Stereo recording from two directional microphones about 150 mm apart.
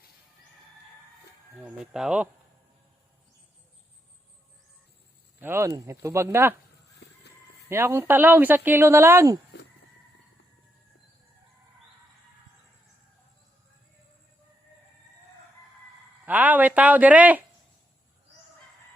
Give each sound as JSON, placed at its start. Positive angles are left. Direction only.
{"t": 1.5, "sound": "speech", "side_deg": -5}
{"t": 5.4, "sound": "speech", "side_deg": -15}
{"t": 7.7, "sound": "speech", "side_deg": -15}
{"t": 16.2, "sound": "speech", "side_deg": -10}